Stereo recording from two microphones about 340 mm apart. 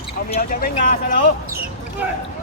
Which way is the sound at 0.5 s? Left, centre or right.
Left.